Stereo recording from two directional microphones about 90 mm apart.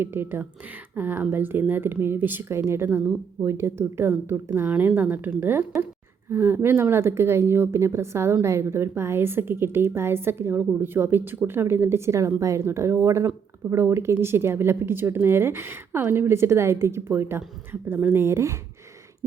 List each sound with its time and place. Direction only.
0.0 s speech: 25° right (ahead or behind)